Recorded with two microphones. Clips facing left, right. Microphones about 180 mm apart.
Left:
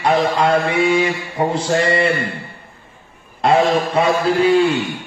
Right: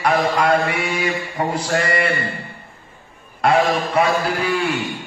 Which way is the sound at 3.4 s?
25° left (ahead or behind).